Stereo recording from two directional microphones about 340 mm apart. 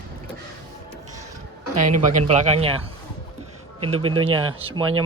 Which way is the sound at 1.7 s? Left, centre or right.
Right.